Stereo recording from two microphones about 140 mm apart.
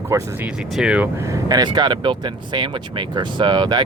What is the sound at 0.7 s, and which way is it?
Speech, 5° right (ahead or behind).